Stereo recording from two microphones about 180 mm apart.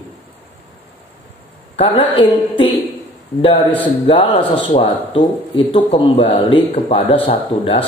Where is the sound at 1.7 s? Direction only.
30° left (ahead or behind).